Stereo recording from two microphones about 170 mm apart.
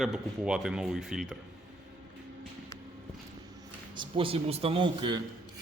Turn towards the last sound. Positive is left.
turn(degrees=-30)  # may be behind; listen again after turning